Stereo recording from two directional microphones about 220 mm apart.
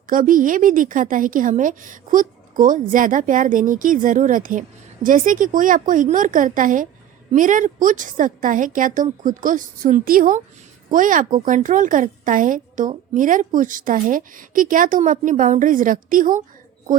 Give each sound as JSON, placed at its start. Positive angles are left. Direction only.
{"t": 0.1, "sound": "speech", "side_deg": -40}